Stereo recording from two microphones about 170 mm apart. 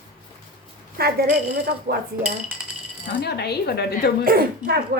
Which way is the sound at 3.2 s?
70° left (ahead or behind).